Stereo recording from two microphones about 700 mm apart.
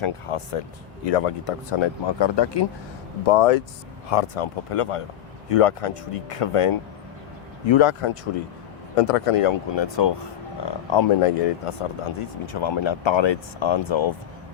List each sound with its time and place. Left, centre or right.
0.0 s speech: left
3.2 s speech: left